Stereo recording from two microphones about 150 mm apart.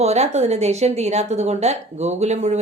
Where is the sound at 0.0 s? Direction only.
45° right (ahead or behind).